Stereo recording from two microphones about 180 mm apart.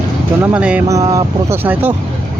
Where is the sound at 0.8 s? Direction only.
20° right (ahead or behind).